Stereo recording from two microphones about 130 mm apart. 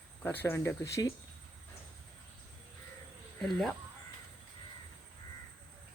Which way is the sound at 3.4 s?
Centre (ahead or behind).